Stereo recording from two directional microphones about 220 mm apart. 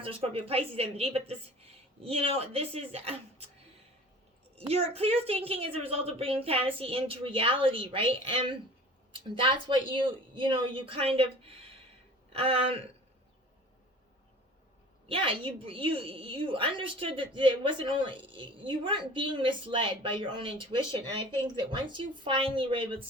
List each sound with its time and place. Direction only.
0.0 s a woman's voice: 25° right (ahead or behind)
4.5 s a woman's voice: 30° right (ahead or behind)
15.0 s a woman's voice: 25° right (ahead or behind)